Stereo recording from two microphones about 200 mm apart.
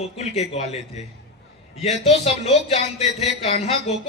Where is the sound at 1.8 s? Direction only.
35° left (ahead or behind).